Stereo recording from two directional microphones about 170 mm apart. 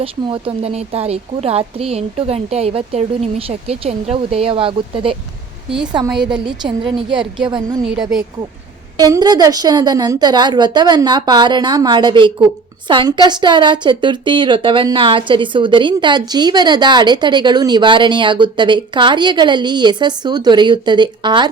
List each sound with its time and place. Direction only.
0.0 s a woman's voice: 30° right (ahead or behind)
6.2 s a woman's voice: 25° right (ahead or behind)
7.2 s speech: 5° right (ahead or behind)
9.0 s a woman's voice: 25° right (ahead or behind)